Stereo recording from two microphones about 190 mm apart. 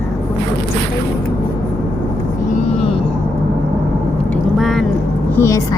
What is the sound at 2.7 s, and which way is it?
Music, 30° left (ahead or behind).